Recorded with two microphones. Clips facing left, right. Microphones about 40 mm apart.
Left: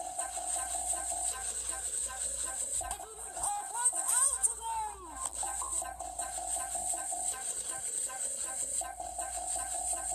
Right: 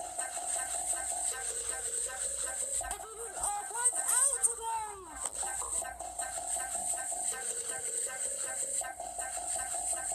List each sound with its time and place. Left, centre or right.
0.0 s music: right
2.9 s music: right
4.6 s a sound: centre
5.5 s music: right
7.3 s a sound: right
9.4 s music: right